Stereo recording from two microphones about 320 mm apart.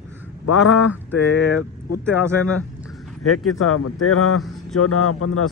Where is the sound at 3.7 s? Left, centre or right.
Left.